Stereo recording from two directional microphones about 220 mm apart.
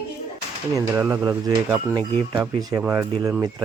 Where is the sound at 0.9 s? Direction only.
10° right (ahead or behind).